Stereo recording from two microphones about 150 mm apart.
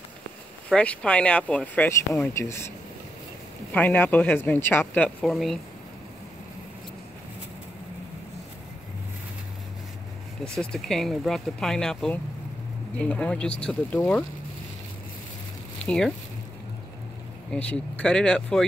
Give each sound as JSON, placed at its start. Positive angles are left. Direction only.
{"t": 0.7, "sound": "speech", "side_deg": 5}
{"t": 1.9, "sound": "speech", "side_deg": 20}
{"t": 3.7, "sound": "speech", "side_deg": 10}
{"t": 10.6, "sound": "speech", "side_deg": 5}
{"t": 15.8, "sound": "speech", "side_deg": 5}
{"t": 17.5, "sound": "speech", "side_deg": 5}